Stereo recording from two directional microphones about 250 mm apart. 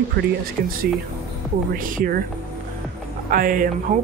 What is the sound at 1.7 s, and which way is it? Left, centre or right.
Speech, right.